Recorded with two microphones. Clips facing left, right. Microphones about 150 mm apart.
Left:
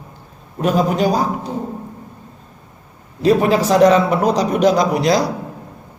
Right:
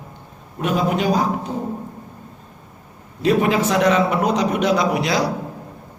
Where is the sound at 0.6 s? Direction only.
40° left (ahead or behind).